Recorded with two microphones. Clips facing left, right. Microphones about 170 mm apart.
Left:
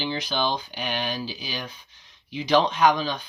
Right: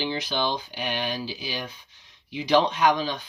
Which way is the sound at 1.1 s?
20° left (ahead or behind).